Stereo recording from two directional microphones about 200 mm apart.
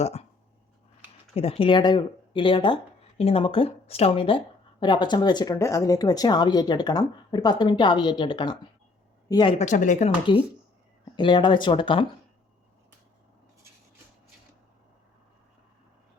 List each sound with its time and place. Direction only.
0.0 s speech: 30° left (ahead or behind)
1.4 s speech: 30° left (ahead or behind)
10.3 s speech: 25° left (ahead or behind)